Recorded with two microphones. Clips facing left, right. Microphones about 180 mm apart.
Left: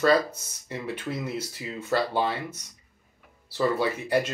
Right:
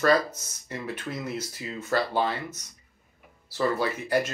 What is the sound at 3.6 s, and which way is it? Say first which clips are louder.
Speech: left 1 dB; 20° left (ahead or behind).